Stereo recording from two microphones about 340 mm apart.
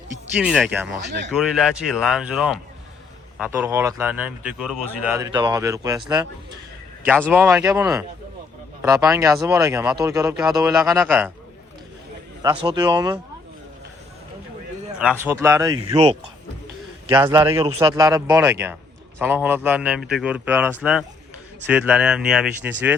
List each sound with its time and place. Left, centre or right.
0.3 s a man's voice: centre
1.0 s speech: right
1.3 s a man's voice: centre
12.6 s speech: centre
14.9 s a man's voice: centre